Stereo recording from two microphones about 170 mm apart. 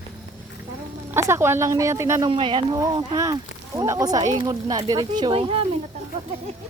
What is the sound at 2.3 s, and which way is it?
Speech, 30° right (ahead or behind).